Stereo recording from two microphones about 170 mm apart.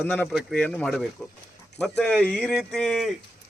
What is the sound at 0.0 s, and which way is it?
A man's voice, 10° left (ahead or behind).